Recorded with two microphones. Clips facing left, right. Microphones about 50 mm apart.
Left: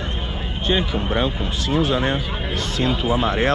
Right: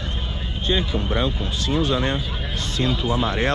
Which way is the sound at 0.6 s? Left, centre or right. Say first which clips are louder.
Left 2 dB; left.